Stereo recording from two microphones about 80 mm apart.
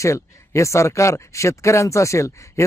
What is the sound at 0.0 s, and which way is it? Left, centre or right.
Speech, left.